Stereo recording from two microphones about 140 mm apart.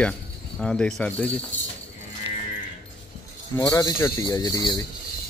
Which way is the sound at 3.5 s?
25° left (ahead or behind).